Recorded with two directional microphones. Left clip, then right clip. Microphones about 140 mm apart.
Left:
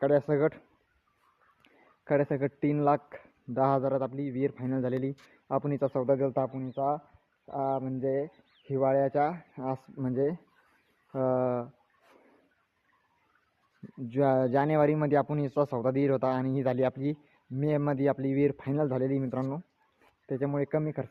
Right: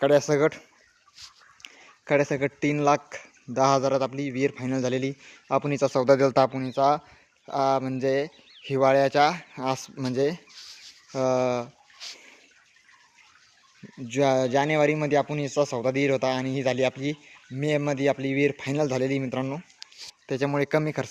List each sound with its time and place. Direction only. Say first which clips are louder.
0.0 s speech: right 5 dB; 20° right (ahead or behind)
1.6 s speech: right 5 dB; 15° right (ahead or behind)
5.9 s speech: right 9 dB; 40° right (ahead or behind)
6.5 s speech: right 7 dB; 60° right (ahead or behind)
6.7 s speech: right 8 dB; 45° right (ahead or behind)
7.4 s speech: right 7 dB; 60° right (ahead or behind)
8.0 s speech: right 5 dB; 30° right (ahead or behind)
9.0 s speech: right 7 dB; 25° right (ahead or behind)
9.6 s speech: right 7 dB; 10° right (ahead or behind)
9.9 s speech: right 4 dB; 30° right (ahead or behind)
10.2 s speech: right 4 dB; 20° right (ahead or behind)
11.4 s speech: right 4 dB; 30° right (ahead or behind)
14.1 s speech: right 4 dB; 10° right (ahead or behind); by 21.1 s 40° right (ahead or behind)